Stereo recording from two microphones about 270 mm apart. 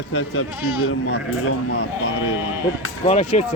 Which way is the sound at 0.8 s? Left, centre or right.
Left.